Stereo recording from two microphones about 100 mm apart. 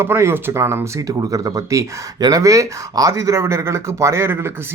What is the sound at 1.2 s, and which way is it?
Speech, 40° right (ahead or behind).